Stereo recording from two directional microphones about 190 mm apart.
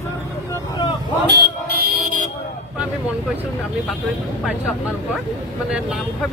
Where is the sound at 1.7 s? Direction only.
50° right (ahead or behind).